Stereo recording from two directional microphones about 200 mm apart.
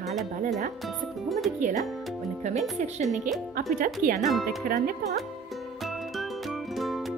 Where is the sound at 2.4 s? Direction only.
35° right (ahead or behind).